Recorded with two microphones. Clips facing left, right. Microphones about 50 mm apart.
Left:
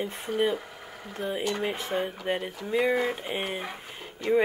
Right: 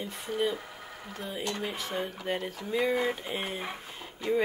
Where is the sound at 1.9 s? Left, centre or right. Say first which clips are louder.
Left 5 dB; left.